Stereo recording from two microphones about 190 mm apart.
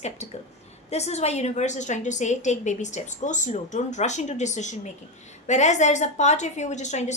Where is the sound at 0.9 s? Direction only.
35° left (ahead or behind).